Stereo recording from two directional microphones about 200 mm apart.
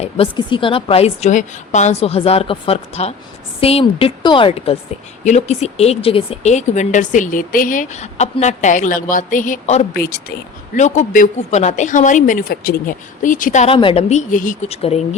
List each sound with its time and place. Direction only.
0.0 s a woman's voice: 25° left (ahead or behind)